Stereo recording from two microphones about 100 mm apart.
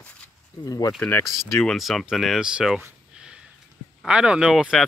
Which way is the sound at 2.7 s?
5° right (ahead or behind).